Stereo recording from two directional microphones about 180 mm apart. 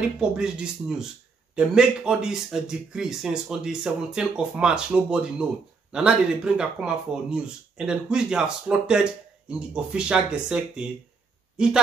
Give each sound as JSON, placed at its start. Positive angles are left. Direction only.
{"t": 0.0, "sound": "a man's voice", "side_deg": -5}